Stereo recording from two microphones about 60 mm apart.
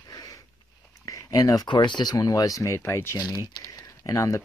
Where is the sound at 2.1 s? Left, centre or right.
Left.